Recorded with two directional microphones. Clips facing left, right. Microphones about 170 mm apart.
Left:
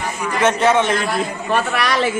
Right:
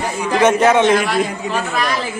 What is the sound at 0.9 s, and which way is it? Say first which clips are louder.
Speech: right 4 dB; 90° right.